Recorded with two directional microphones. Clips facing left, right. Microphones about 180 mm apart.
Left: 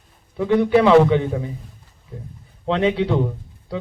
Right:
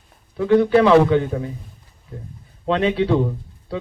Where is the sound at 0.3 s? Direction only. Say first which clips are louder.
Right 1 dB; 15° left (ahead or behind).